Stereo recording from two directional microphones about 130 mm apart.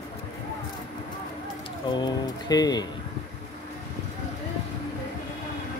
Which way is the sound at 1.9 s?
35° left (ahead or behind).